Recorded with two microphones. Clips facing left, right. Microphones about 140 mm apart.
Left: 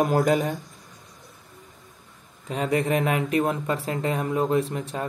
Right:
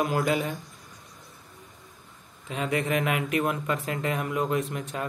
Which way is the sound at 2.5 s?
35° left (ahead or behind).